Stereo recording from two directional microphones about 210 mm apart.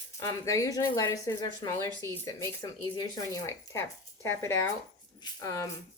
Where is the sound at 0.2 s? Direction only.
15° left (ahead or behind).